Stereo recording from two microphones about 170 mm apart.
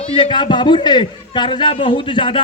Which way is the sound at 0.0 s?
30° left (ahead or behind).